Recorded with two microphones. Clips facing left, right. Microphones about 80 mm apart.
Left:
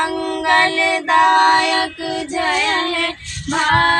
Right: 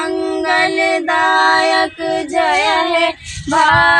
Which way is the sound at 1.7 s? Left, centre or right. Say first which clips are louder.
Right 5 dB; right.